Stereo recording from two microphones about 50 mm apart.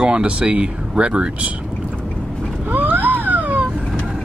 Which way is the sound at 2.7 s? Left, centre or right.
Right.